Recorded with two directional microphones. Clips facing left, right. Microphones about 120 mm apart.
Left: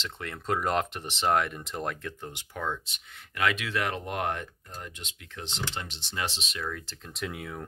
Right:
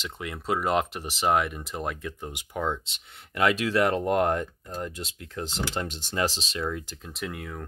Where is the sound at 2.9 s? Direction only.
30° right (ahead or behind).